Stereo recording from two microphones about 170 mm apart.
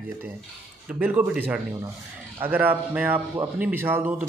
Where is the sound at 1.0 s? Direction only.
10° right (ahead or behind).